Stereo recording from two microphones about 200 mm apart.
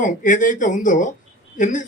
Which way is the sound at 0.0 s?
40° left (ahead or behind).